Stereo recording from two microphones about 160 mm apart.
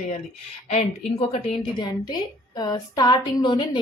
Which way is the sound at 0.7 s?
45° left (ahead or behind).